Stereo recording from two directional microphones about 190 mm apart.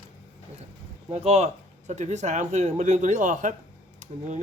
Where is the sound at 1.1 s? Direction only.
35° right (ahead or behind).